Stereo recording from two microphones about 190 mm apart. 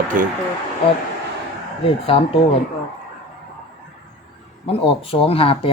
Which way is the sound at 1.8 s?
30° left (ahead or behind).